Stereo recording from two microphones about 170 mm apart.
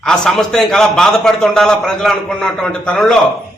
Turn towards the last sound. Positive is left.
turn(degrees=5)  # may be behind; listen again after turning